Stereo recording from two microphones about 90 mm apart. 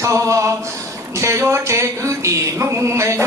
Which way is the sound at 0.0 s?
35° right (ahead or behind).